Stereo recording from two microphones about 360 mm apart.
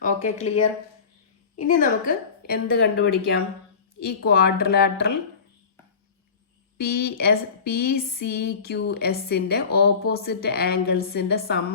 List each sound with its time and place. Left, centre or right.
1.5 s speech: left
6.7 s speech: left